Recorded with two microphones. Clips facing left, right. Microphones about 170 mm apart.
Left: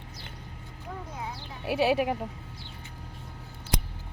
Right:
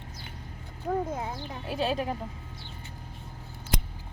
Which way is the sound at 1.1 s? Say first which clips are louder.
Right 4 dB; 50° right (ahead or behind).